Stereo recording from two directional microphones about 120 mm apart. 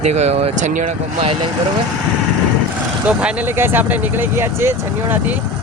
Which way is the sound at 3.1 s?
10° right (ahead or behind).